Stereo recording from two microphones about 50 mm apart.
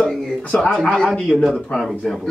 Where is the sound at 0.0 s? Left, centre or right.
Centre.